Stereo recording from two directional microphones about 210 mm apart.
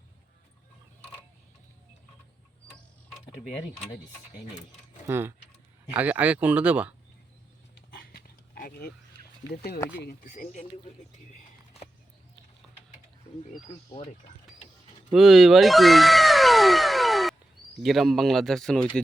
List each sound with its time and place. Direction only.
5.0 s speech: 10° right (ahead or behind)
7.8 s dog: 45° left (ahead or behind)
10.0 s speech: 45° left (ahead or behind)
13.7 s speech: 25° left (ahead or behind)
15.1 s speech: centre (ahead or behind)